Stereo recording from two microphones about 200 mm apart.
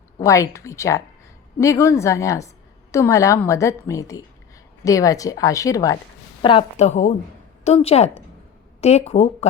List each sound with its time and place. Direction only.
0.2 s a woman's voice: 15° left (ahead or behind); by 9.5 s 30° left (ahead or behind)